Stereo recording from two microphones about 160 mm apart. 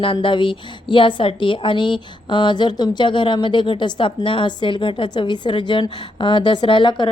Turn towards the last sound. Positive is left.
turn(degrees=30)  # may be behind; listen again after turning